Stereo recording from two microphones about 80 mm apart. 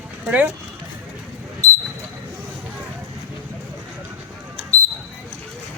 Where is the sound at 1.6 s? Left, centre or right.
Right.